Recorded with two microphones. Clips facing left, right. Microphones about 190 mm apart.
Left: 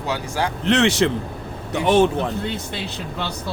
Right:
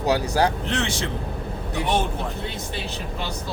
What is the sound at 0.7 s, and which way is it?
Speech, 70° left (ahead or behind).